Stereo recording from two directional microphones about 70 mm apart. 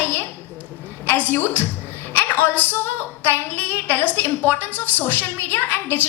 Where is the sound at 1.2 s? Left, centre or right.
Left.